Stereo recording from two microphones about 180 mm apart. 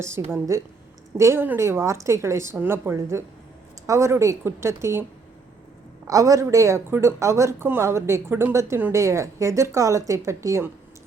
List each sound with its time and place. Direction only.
0.3 s speech: 20° right (ahead or behind)
6.1 s speech: 20° right (ahead or behind)